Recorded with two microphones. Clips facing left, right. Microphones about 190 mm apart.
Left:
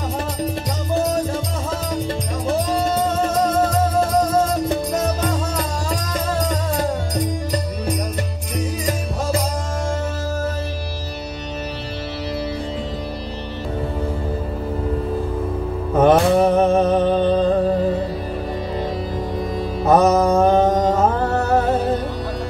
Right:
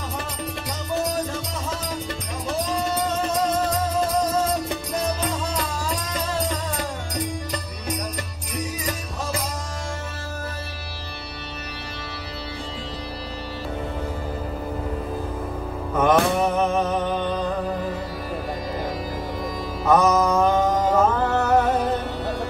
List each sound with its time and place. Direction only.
15.9 s mantra: 30° left (ahead or behind)
16.6 s music: 30° left (ahead or behind)
19.8 s mantra: 30° left (ahead or behind)